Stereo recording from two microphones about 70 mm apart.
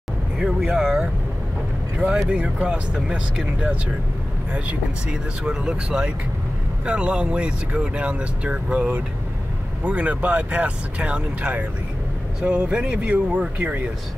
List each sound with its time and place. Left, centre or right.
0.4 s speech: centre